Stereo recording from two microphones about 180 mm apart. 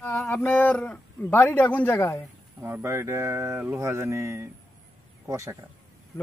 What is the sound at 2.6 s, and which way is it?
Speech, 15° right (ahead or behind).